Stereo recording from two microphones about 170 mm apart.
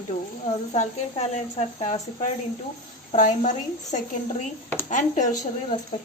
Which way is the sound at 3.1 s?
45° left (ahead or behind).